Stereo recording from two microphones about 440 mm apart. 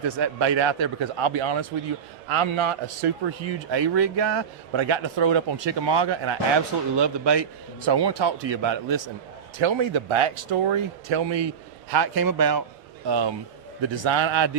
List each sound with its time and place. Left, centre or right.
0.2 s a man's voice: right
4.8 s speech: right
9.6 s a man's voice: right
11.9 s speech: right
13.1 s speech: right
13.9 s speech: right